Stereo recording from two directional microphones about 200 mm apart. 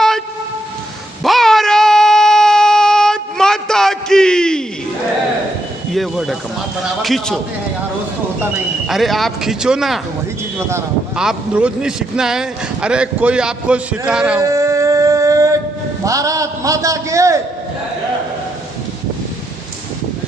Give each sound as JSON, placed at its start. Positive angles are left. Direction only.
{"t": 1.2, "sound": "a sound", "side_deg": 0}
{"t": 5.9, "sound": "speech", "side_deg": 0}
{"t": 8.4, "sound": "speech", "side_deg": 0}
{"t": 11.1, "sound": "speech", "side_deg": -5}
{"t": 14.4, "sound": "a sound", "side_deg": -15}
{"t": 16.0, "sound": "a man's voice", "side_deg": -15}